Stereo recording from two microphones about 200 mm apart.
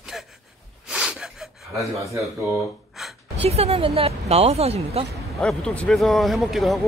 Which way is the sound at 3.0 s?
Centre (ahead or behind).